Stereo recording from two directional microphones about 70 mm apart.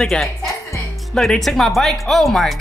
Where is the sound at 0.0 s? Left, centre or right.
Centre.